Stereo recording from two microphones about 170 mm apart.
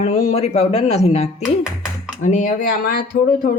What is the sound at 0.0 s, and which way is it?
A woman's voice, 40° left (ahead or behind).